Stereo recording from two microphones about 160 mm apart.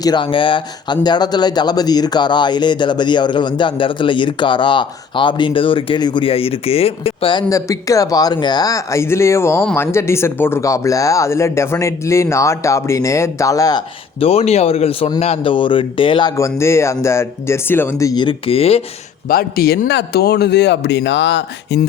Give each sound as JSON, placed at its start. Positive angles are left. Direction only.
{"t": 0.0, "sound": "speech", "side_deg": 30}
{"t": 7.5, "sound": "speech", "side_deg": 20}
{"t": 14.2, "sound": "speech", "side_deg": 40}
{"t": 16.4, "sound": "speech", "side_deg": 15}
{"t": 19.3, "sound": "speech", "side_deg": 70}